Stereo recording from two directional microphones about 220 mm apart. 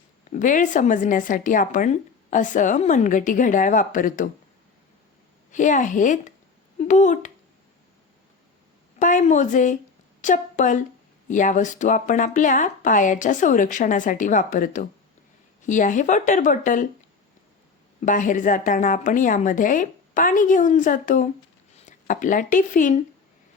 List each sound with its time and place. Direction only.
0.3 s speech: 35° left (ahead or behind)
5.5 s speech: 35° left (ahead or behind)
9.0 s a woman's voice: 35° left (ahead or behind)
18.0 s speech: 35° left (ahead or behind)